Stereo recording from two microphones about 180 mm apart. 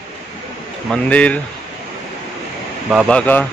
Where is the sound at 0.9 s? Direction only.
5° left (ahead or behind).